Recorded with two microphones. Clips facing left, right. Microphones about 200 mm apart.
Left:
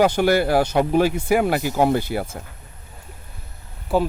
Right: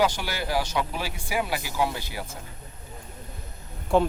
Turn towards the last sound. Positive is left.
turn(degrees=5)  # may be behind; listen again after turning